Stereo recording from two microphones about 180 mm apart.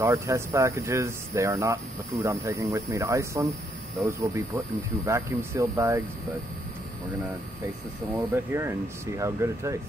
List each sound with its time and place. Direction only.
0.0 s speech: 15° right (ahead or behind)
8.1 s speech: 10° right (ahead or behind)